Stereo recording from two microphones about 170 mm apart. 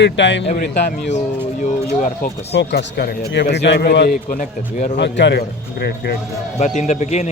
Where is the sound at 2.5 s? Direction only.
85° left.